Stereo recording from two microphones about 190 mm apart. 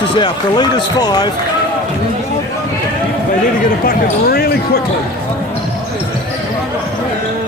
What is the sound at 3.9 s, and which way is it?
Speech, 55° left (ahead or behind).